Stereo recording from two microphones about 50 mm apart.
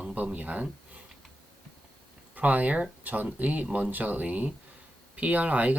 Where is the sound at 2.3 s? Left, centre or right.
Right.